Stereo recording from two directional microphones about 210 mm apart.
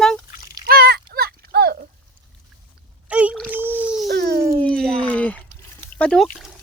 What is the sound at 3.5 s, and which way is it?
Dog, 10° right (ahead or behind).